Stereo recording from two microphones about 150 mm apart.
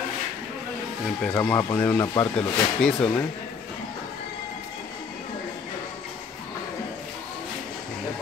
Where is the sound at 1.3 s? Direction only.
20° left (ahead or behind).